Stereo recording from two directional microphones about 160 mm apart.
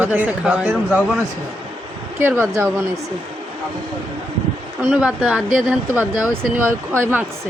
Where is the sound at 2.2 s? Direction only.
15° right (ahead or behind).